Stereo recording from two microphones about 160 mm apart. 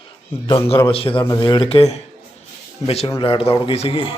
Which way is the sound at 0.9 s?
35° left (ahead or behind).